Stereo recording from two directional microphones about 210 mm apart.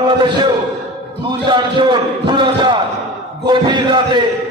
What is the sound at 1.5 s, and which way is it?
A man's voice, 20° right (ahead or behind).